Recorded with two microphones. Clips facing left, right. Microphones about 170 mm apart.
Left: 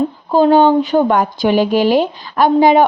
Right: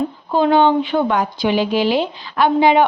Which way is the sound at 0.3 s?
40° left (ahead or behind).